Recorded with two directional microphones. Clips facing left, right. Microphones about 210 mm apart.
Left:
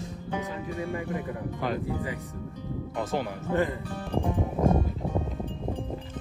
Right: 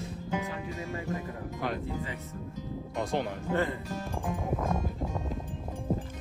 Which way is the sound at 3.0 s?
5° left (ahead or behind).